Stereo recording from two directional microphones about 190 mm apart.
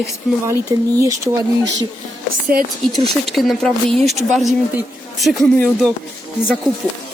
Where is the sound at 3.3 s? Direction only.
Centre (ahead or behind).